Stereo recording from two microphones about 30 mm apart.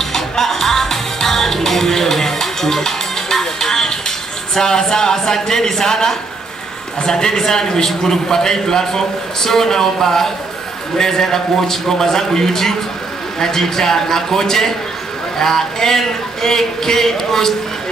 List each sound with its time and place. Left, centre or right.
0.0 s music: centre
4.6 s speech: centre